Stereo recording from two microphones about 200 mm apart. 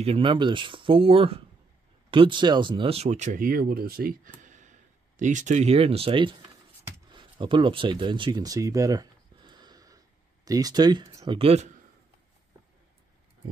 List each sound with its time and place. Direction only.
0.0 s speech: 30° right (ahead or behind)
7.1 s a sound: 25° right (ahead or behind)
11.3 s speech: 30° right (ahead or behind)